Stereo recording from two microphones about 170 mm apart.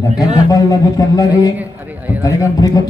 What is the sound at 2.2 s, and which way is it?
Speech, 20° left (ahead or behind).